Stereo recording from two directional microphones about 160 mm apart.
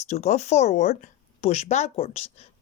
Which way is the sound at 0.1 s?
45° left (ahead or behind).